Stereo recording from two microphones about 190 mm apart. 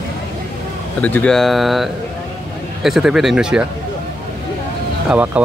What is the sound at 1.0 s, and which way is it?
Speech, 5° left (ahead or behind).